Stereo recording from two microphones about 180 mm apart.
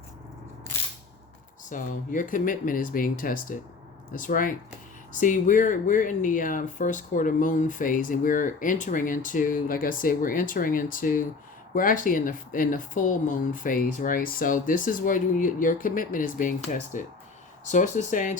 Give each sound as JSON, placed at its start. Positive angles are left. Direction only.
{"t": 1.7, "sound": "speech", "side_deg": 50}